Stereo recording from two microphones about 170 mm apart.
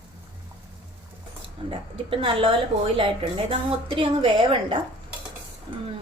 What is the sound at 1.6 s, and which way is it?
A woman's voice, 30° right (ahead or behind).